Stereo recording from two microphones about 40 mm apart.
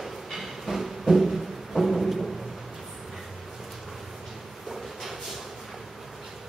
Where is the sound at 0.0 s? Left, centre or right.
Centre.